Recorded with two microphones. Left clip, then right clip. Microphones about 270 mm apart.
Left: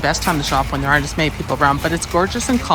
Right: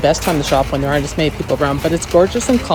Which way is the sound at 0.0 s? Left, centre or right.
Centre.